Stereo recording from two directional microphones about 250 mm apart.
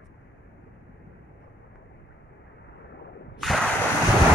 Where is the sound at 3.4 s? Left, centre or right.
Centre.